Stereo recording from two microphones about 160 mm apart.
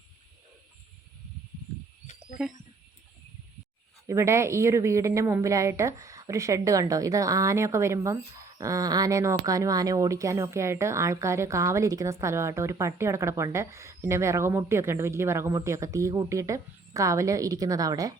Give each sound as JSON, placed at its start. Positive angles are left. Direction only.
{"t": 4.0, "sound": "a woman's voice", "side_deg": -20}